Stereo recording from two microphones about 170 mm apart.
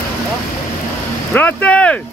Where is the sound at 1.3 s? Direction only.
10° left (ahead or behind).